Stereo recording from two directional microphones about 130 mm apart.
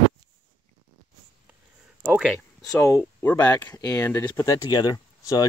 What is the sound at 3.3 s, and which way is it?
Speech, 25° left (ahead or behind).